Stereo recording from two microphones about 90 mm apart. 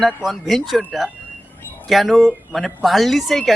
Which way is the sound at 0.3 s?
Centre (ahead or behind).